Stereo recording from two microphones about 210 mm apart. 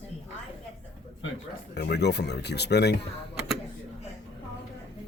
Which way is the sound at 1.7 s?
55° left (ahead or behind).